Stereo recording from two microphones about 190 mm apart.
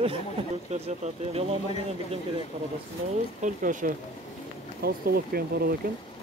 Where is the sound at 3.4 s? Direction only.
40° right (ahead or behind).